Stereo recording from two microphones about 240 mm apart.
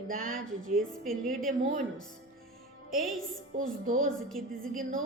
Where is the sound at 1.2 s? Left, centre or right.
Right.